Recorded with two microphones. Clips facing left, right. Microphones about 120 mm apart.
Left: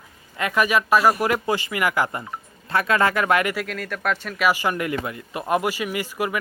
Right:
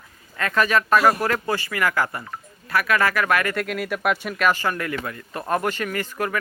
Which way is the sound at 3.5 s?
5° right (ahead or behind).